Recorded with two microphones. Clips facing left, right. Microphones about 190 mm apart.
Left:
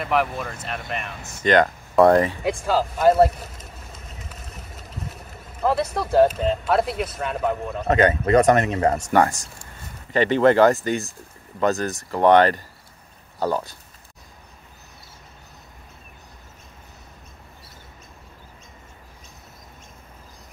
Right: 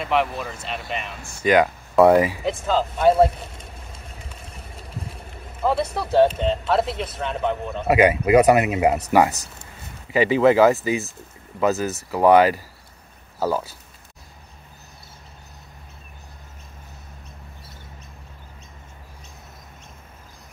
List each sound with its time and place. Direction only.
0.0 s speech: centre (ahead or behind)
2.6 s speech: 5° left (ahead or behind)
4.5 s vehicle: 30° right (ahead or behind)
5.6 s speech: centre (ahead or behind)
7.9 s speech: 10° right (ahead or behind)